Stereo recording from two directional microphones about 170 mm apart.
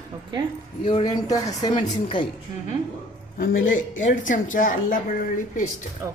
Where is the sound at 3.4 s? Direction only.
60° left (ahead or behind).